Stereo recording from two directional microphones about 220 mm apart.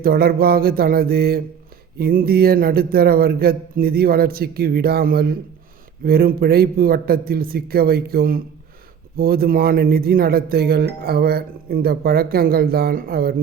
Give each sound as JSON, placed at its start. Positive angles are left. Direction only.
{"t": 0.0, "sound": "speech", "side_deg": -45}